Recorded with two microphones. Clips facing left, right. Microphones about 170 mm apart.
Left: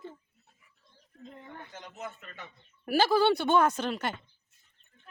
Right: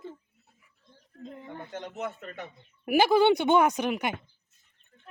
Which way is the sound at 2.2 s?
50° right (ahead or behind).